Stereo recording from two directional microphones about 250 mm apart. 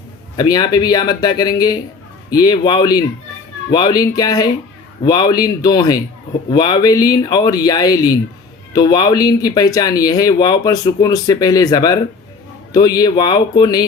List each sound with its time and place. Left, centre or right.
0.3 s speech: centre